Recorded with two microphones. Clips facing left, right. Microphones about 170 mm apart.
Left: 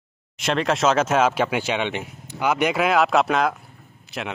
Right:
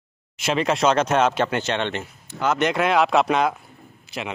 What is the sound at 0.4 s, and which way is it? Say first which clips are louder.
Speech: even; centre (ahead or behind).